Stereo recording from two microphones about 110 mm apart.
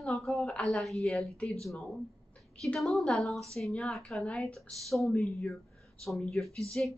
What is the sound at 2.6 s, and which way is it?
Speech, centre (ahead or behind).